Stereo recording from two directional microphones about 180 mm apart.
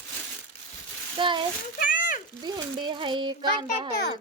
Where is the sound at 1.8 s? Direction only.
50° left (ahead or behind).